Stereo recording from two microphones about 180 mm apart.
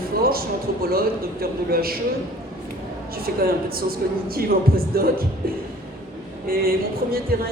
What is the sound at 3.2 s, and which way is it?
Speech, 55° right (ahead or behind).